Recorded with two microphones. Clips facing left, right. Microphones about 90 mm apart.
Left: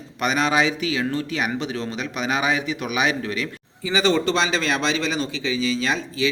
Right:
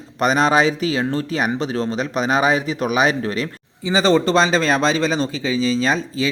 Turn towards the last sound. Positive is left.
turn(degrees=-35)  # may be behind; listen again after turning